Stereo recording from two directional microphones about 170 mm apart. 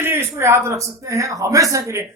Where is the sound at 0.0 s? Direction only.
15° right (ahead or behind).